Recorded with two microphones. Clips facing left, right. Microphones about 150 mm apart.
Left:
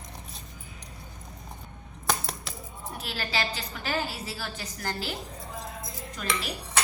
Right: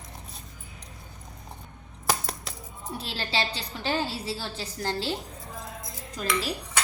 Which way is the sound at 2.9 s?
30° right (ahead or behind).